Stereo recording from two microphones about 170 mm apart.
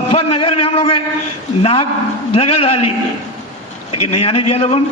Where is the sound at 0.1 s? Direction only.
35° left (ahead or behind).